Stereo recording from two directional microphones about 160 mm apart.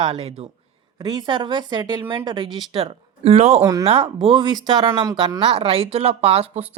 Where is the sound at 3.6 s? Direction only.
20° right (ahead or behind).